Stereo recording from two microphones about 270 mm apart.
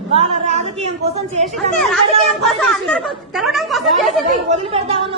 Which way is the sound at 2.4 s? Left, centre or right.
Centre.